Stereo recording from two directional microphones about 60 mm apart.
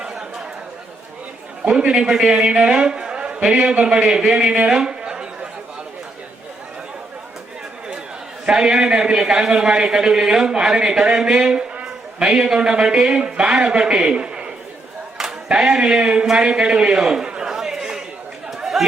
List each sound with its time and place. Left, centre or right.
0.0 s chatter: centre
1.6 s a man's voice: centre
4.5 s a sound: centre
8.4 s a man's voice: centre
16.5 s a sound: centre
18.5 s chatter: centre